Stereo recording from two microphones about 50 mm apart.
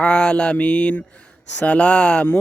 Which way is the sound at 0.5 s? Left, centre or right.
Left.